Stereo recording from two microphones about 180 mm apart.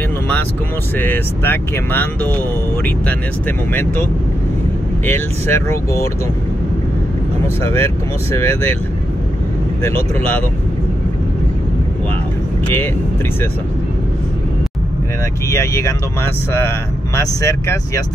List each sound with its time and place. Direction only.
0.9 s speech: 10° left (ahead or behind)
5.0 s speech: 15° left (ahead or behind)
7.4 s speech: 15° left (ahead or behind)
9.8 s speech: 10° left (ahead or behind)
12.6 s speech: 10° left (ahead or behind)
15.5 s speech: 15° left (ahead or behind)